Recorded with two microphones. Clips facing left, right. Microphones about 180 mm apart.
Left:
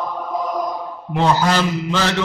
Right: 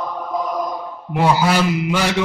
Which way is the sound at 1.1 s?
10° right (ahead or behind).